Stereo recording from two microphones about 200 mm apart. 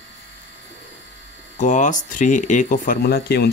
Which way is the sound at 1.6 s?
40° left (ahead or behind).